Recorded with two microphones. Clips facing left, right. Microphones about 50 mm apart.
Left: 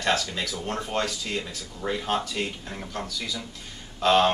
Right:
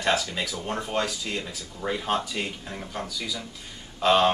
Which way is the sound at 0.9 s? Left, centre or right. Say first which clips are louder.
Even; centre.